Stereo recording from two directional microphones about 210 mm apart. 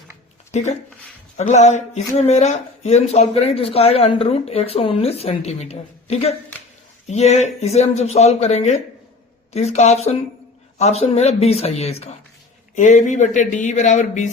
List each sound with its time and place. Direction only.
0.5 s speech: 35° left (ahead or behind)